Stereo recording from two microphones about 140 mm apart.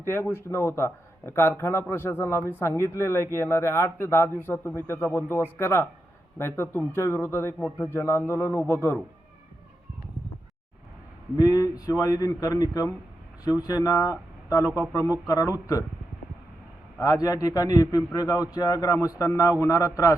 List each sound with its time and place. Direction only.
0.0 s a man's voice: 15° left (ahead or behind)
11.3 s a man's voice: 25° left (ahead or behind)
17.0 s a man's voice: 25° left (ahead or behind)